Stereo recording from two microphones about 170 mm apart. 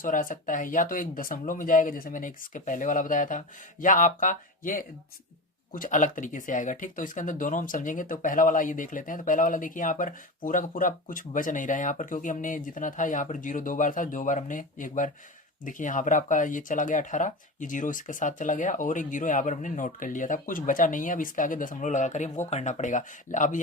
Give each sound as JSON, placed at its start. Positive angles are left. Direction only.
{"t": 0.0, "sound": "speech", "side_deg": 50}